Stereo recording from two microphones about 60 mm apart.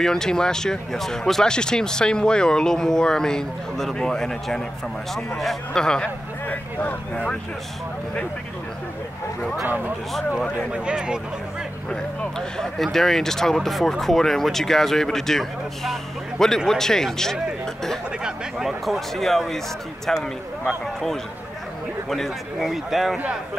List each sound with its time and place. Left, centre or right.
0.0 s speech: centre
6.4 s a sound: left
10.7 s speech: centre
11.9 s speech: centre
18.2 s a man's voice: centre
18.9 s a man's voice: centre